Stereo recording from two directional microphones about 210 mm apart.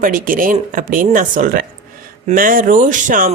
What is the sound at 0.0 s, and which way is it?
Speech, 40° right (ahead or behind).